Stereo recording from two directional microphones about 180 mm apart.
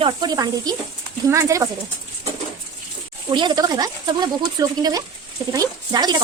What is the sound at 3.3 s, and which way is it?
Speech, 25° right (ahead or behind).